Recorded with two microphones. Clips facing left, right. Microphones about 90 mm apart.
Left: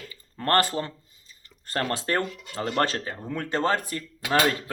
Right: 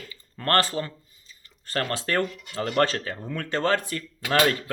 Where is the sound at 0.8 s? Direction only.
25° left (ahead or behind).